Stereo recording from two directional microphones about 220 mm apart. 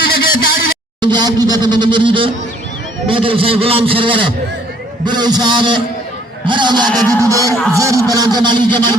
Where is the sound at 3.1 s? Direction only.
25° right (ahead or behind).